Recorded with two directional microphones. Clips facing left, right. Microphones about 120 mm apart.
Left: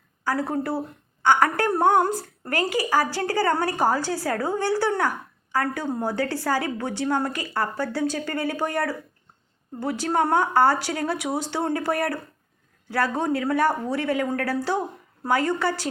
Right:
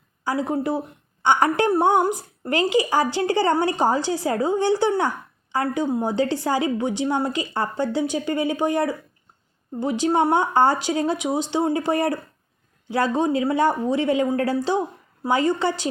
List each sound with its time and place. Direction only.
0.3 s a woman's voice: 15° right (ahead or behind)